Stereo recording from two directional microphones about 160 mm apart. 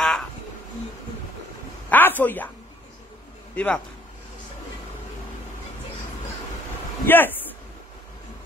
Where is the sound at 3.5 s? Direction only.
10° left (ahead or behind).